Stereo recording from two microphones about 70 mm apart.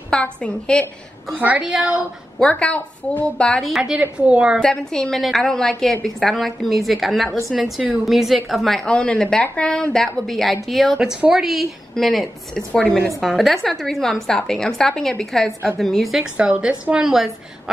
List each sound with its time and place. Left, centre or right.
0.2 s a woman's voice: centre
1.3 s a woman's voice: right
2.3 s a woman's voice: centre
3.6 s a woman's voice: centre
4.0 s a woman's voice: centre
4.6 s a woman's voice: centre
11.0 s a woman's voice: centre
12.8 s a woman's voice: left
13.2 s a woman's voice: centre
16.2 s a woman's voice: centre